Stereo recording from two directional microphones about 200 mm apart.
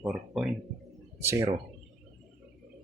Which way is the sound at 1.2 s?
15° right (ahead or behind).